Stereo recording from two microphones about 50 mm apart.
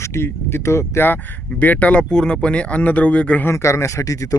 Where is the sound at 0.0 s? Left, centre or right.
Left.